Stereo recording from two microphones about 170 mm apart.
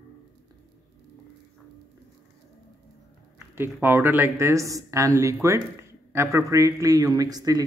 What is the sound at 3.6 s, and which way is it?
Speech, 15° right (ahead or behind).